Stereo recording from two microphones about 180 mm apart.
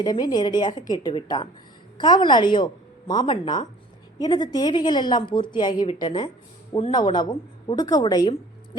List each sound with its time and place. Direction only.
0.0 s a woman's voice: 25° left (ahead or behind)